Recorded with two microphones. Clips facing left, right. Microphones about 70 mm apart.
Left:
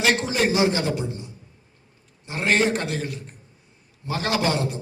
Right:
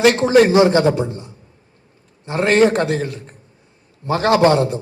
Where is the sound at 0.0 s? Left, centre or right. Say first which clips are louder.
Right 10 dB; right.